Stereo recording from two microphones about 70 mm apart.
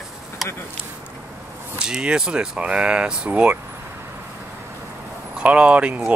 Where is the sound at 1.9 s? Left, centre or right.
Centre.